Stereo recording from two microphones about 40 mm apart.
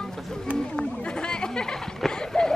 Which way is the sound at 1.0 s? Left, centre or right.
Left.